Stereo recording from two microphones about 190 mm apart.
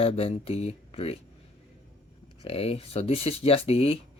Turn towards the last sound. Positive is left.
turn(degrees=30)  # may be behind; listen again after turning